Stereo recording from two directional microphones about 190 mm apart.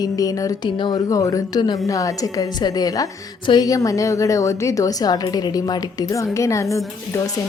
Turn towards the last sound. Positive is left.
turn(degrees=15)  # may be behind; listen again after turning